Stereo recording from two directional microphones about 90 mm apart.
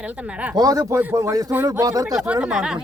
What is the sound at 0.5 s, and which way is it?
Speech, 45° right (ahead or behind).